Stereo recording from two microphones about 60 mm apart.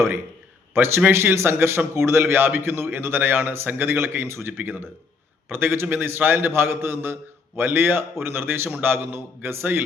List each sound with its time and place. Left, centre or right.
0.7 s a man's voice: right